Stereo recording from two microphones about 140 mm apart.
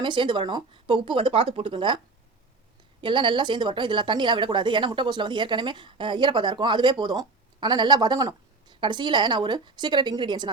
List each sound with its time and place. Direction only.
0.0 s speech: 35° right (ahead or behind)
3.0 s speech: 35° right (ahead or behind)